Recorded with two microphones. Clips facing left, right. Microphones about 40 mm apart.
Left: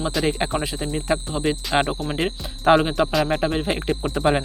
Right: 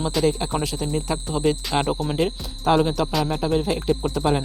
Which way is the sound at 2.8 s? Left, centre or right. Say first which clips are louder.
Left 1 dB; left.